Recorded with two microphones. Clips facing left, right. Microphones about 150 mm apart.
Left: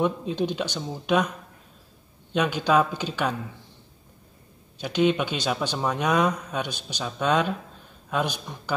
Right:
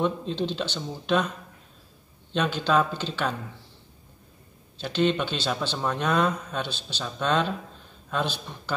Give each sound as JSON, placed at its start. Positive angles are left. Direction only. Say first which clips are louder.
{"t": 0.0, "sound": "speech", "louder": "left 2 dB", "side_deg": 10}
{"t": 2.3, "sound": "speech", "louder": "left 2 dB", "side_deg": 10}
{"t": 4.7, "sound": "speech", "louder": "left 2 dB", "side_deg": 10}